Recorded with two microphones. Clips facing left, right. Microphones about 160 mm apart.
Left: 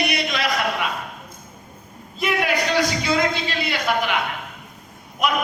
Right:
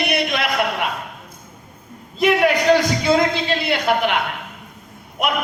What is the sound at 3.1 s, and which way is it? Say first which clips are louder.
A man's voice: right 4 dB; 50° right (ahead or behind).